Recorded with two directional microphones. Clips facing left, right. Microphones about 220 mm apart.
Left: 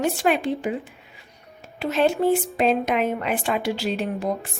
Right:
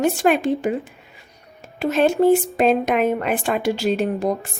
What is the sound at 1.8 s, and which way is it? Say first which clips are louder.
Speech: right 4 dB; 45° right (ahead or behind).